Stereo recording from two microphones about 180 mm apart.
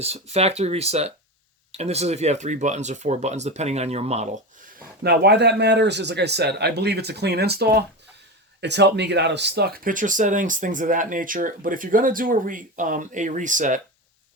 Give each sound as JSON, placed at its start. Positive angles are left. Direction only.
{"t": 0.0, "sound": "speech", "side_deg": -35}
{"t": 5.0, "sound": "speech", "side_deg": -65}